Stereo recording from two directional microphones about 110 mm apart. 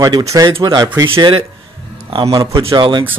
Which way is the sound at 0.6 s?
40° right (ahead or behind).